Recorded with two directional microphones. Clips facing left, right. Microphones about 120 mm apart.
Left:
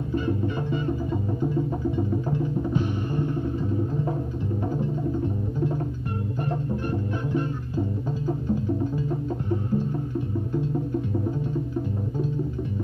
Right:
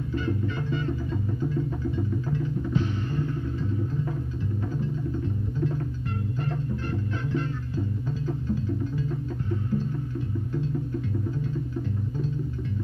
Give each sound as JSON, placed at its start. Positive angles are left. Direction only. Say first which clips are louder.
{"t": 0.1, "sound": "music", "louder": "left 4 dB", "side_deg": 25}
{"t": 6.9, "sound": "music", "louder": "left 2 dB", "side_deg": 15}